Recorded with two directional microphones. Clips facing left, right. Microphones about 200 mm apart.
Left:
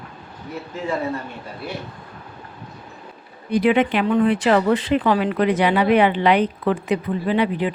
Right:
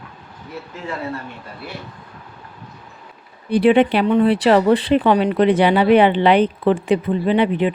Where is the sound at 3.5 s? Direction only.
30° right (ahead or behind).